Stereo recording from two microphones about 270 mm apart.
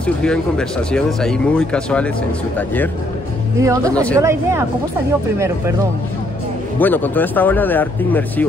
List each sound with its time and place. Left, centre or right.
0.0 s speech: centre
3.5 s speech: centre
3.9 s speech: centre
4.2 s speech: centre
6.8 s speech: centre